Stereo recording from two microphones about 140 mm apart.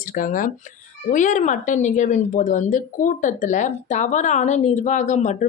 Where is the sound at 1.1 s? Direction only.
65° left (ahead or behind).